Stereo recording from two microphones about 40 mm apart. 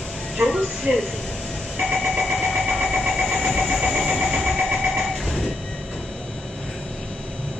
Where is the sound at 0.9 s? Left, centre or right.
Right.